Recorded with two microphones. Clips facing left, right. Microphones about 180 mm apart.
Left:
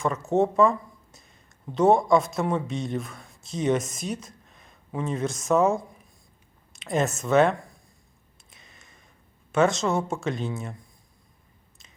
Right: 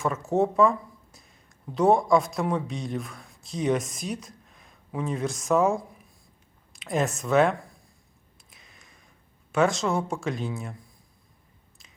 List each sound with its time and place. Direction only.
0.0 s speech: centre (ahead or behind)
8.4 s a sound: centre (ahead or behind)
9.5 s speech: centre (ahead or behind)